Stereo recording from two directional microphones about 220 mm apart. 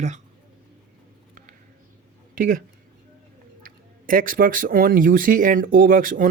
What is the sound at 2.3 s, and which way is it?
Speech, 40° right (ahead or behind).